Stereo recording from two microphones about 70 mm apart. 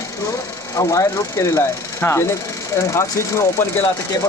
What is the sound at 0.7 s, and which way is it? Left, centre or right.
Speech, left.